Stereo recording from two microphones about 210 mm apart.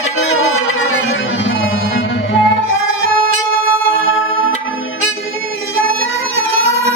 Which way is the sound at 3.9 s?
70° left (ahead or behind).